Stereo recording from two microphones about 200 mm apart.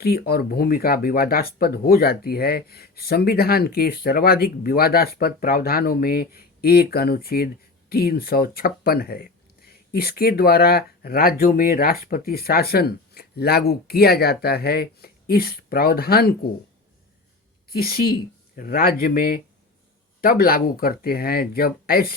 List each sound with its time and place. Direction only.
0.0 s speech: 50° left (ahead or behind)
17.7 s speech: 50° left (ahead or behind)